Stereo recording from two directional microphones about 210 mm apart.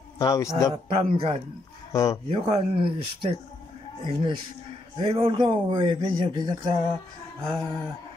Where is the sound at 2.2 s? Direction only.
30° right (ahead or behind).